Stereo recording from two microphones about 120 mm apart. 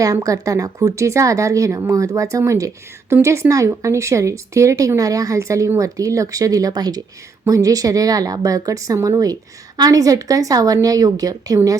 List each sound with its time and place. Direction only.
0.0 s a woman's voice: 30° right (ahead or behind)